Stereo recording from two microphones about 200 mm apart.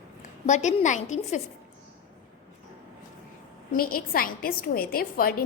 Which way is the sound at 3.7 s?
45° left (ahead or behind).